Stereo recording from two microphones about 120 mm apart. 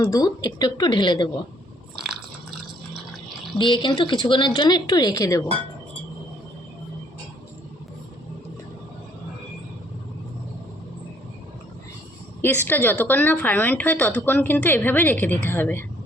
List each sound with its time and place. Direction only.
0.0 s speech: 30° left (ahead or behind)
3.6 s speech: 40° left (ahead or behind)
12.4 s a woman's voice: 15° left (ahead or behind)